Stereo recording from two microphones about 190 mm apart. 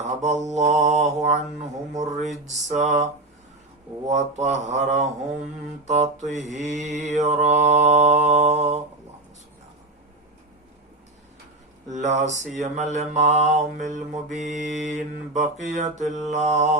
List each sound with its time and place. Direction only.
0.0 s mantra: 35° right (ahead or behind)
2.1 s speech: centre (ahead or behind)
2.6 s mantra: 40° right (ahead or behind)
4.1 s mantra: 35° right (ahead or behind)
11.9 s mantra: 35° right (ahead or behind)